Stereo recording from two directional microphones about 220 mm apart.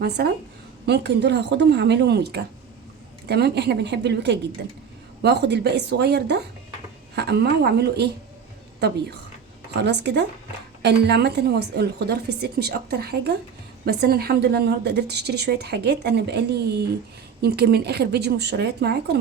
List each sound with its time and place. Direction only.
0.2 s a woman's voice: 45° right (ahead or behind)
9.8 s a woman's voice: 50° right (ahead or behind)